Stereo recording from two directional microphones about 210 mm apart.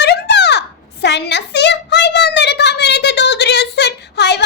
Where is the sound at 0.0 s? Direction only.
55° left (ahead or behind).